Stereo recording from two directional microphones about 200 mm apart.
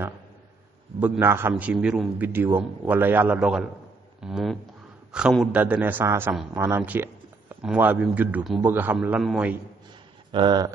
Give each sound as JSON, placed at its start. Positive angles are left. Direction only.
{"t": 0.9, "sound": "a man's voice", "side_deg": -5}
{"t": 10.3, "sound": "speech", "side_deg": -20}